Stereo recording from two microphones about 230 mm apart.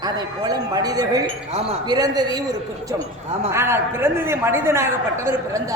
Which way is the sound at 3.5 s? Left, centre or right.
Centre.